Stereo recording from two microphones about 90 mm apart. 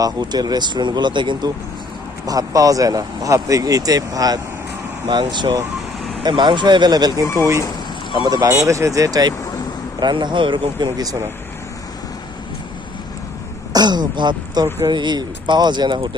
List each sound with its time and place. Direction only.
0.0 s speech: 50° right (ahead or behind)
2.2 s speech: 40° right (ahead or behind)
5.0 s speech: 60° right (ahead or behind)
7.3 s speech: 40° right (ahead or behind)
8.1 s speech: 50° right (ahead or behind)
8.4 s speech: 35° right (ahead or behind)
10.0 s speech: 55° right (ahead or behind)
13.7 s speech: 50° right (ahead or behind)